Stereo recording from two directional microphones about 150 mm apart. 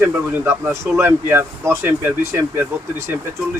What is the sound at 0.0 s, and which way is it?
Speech, 15° right (ahead or behind).